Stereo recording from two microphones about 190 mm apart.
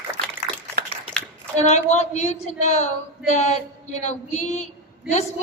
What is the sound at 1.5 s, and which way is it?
A man's voice, 35° left (ahead or behind).